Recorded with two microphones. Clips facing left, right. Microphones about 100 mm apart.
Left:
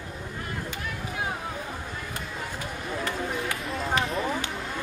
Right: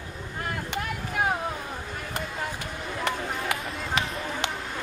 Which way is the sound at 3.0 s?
75° right (ahead or behind).